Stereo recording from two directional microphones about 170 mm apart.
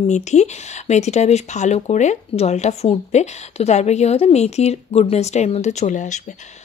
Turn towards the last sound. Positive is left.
turn(degrees=45)  # may be behind; listen again after turning